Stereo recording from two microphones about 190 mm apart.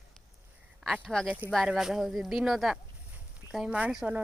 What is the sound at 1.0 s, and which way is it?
Speech, 5° left (ahead or behind).